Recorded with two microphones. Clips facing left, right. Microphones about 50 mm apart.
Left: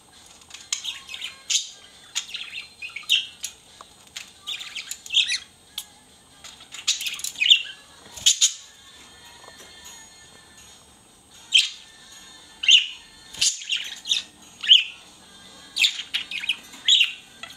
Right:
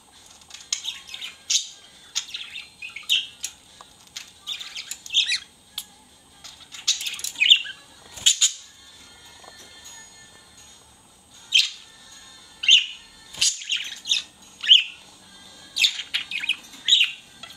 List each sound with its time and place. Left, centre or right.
0.5 s squawk: centre
2.1 s bird: centre
2.9 s bird: centre
4.1 s a sound: centre
5.2 s squawk: centre
6.4 s bird: centre
7.3 s bird: centre
12.5 s bird: centre
16.7 s bird: centre
17.4 s drip: left